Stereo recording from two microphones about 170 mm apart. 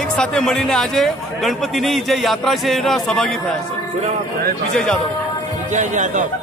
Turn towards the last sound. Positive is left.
turn(degrees=-45)  # may be behind; listen again after turning